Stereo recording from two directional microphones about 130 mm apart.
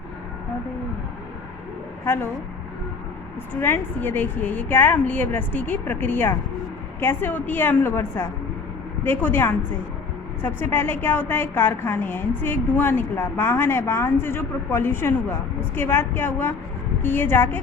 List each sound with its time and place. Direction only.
3.5 s a woman's voice: 15° left (ahead or behind)